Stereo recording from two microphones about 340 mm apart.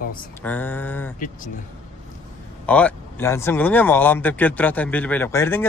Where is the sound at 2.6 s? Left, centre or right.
Centre.